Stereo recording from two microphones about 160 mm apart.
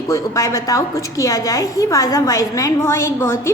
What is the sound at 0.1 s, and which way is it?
A woman's voice, 20° left (ahead or behind).